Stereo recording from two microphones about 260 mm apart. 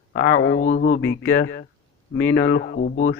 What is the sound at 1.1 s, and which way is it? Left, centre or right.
A man's voice, left.